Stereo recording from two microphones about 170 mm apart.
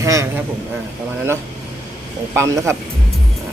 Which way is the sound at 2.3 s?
15° right (ahead or behind).